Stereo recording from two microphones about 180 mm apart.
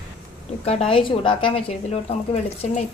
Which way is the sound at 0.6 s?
35° left (ahead or behind).